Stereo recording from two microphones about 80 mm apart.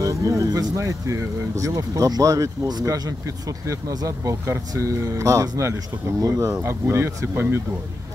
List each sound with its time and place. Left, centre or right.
0.0 s speech: right